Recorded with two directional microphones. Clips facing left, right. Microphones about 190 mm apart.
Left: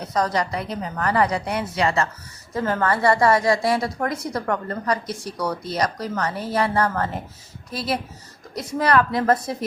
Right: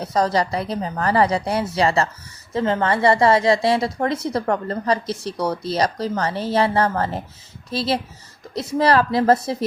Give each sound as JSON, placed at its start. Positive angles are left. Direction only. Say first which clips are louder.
{"t": 0.0, "sound": "a woman's voice", "louder": "right 3 dB", "side_deg": -30}